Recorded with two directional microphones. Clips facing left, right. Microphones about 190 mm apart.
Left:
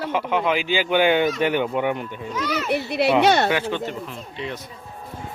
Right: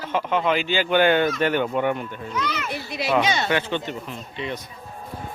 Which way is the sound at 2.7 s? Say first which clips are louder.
Left 6 dB; 60° left (ahead or behind).